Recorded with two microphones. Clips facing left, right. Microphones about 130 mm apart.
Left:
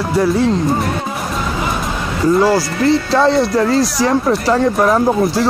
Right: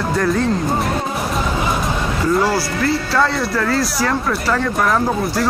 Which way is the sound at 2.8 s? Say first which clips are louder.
Left 6 dB; 25° left (ahead or behind).